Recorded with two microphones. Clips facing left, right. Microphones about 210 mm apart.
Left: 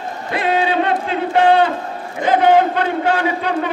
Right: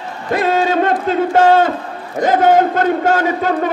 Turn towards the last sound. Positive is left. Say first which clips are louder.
# right 3 dB
turn(degrees=-45)  # may be behind; listen again after turning